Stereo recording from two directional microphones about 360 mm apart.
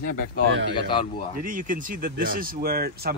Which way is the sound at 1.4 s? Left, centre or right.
Right.